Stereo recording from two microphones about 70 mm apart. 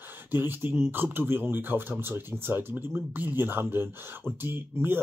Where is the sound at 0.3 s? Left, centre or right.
Right.